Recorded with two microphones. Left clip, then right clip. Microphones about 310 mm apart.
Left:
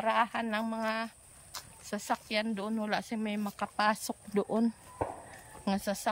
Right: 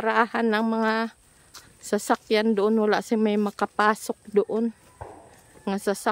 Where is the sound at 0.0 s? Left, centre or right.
Centre.